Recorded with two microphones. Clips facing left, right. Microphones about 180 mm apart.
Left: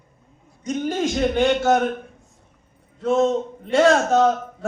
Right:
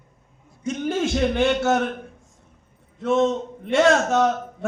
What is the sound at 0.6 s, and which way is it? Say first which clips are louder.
A man's voice: left 1 dB; 35° left (ahead or behind).